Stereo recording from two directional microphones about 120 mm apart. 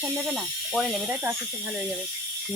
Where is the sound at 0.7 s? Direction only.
Centre (ahead or behind).